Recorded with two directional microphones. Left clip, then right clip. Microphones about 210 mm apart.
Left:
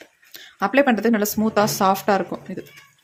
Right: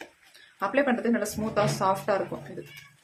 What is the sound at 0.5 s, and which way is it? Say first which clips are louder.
Speech: left 7 dB; 50° left (ahead or behind).